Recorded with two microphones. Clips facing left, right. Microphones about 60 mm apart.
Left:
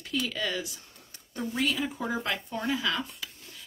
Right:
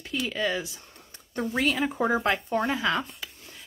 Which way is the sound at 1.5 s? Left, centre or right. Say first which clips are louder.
Right 3 dB; right.